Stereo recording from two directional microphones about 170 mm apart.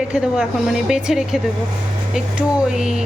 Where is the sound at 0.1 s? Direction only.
5° right (ahead or behind).